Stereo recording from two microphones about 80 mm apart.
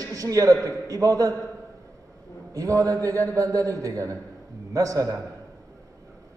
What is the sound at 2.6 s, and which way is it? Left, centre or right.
A man's voice, right.